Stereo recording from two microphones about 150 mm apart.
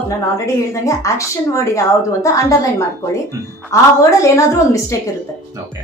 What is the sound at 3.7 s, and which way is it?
A woman's voice, 20° left (ahead or behind).